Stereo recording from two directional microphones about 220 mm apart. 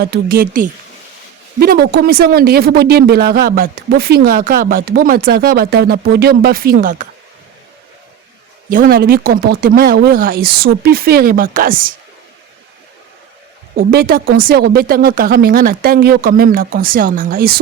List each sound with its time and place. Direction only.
0.0 s speech: 45° right (ahead or behind)
8.7 s speech: 40° right (ahead or behind)
13.7 s speech: 45° right (ahead or behind)